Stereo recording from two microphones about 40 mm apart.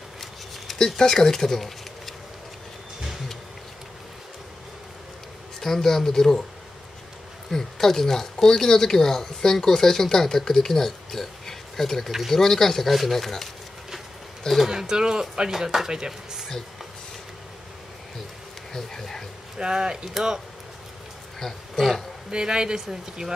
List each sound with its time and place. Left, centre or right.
0.7 s speech: centre
5.6 s speech: centre
7.5 s speech: centre
14.7 s speech: centre
18.7 s speech: centre
19.6 s speech: centre
21.4 s speech: centre
22.3 s speech: centre